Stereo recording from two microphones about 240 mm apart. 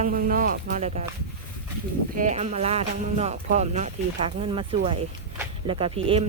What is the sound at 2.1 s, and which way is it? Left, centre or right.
Speech, right.